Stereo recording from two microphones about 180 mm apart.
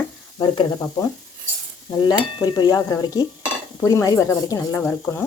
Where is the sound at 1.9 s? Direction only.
25° left (ahead or behind).